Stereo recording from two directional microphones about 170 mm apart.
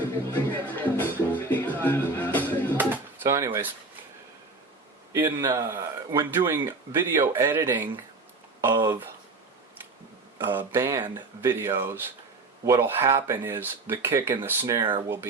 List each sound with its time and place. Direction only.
0.0 s music: 10° left (ahead or behind)
2.7 s drawer open or close: 15° right (ahead or behind)
5.1 s speech: 15° right (ahead or behind)
10.3 s speech: 10° right (ahead or behind)
14.8 s speech: 30° right (ahead or behind)